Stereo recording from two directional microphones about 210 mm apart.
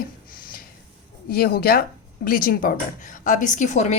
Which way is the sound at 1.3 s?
50° left (ahead or behind).